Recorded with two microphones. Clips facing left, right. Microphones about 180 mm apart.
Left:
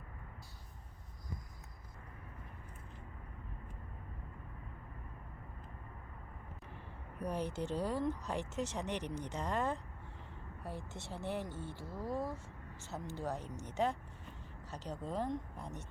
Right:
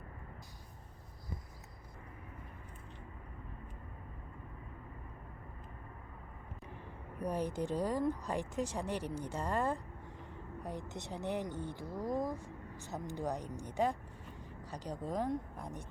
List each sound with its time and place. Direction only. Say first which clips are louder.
7.2 s speech: right 2 dB; 10° right (ahead or behind)